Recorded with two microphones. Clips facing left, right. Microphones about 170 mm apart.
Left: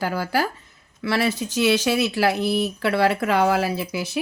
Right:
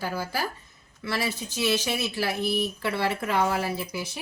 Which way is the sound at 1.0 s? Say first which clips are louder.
Left 7 dB; 85° left.